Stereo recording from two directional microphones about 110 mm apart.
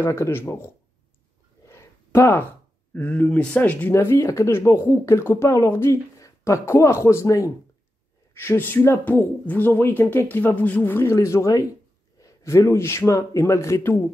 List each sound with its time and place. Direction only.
0.0 s speech: 20° left (ahead or behind)
1.7 s a sound: 25° left (ahead or behind)
2.9 s speech: 15° left (ahead or behind)
3.9 s speech: 25° left (ahead or behind)